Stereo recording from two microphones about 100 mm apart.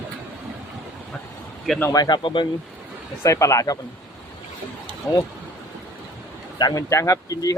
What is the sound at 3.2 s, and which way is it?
Speech, 30° left (ahead or behind).